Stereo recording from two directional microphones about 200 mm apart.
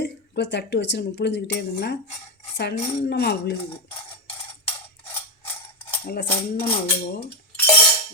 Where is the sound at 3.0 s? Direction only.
55° left (ahead or behind).